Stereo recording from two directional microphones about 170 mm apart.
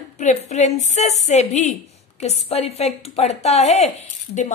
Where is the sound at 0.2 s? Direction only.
45° left (ahead or behind).